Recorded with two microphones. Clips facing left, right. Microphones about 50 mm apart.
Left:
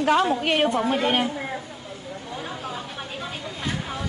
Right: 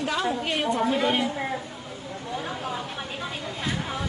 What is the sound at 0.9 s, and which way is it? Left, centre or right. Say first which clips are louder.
Speech: left 1 dB; left.